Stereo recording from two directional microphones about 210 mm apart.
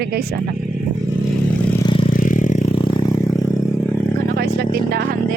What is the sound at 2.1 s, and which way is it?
Vehicle, 40° left (ahead or behind).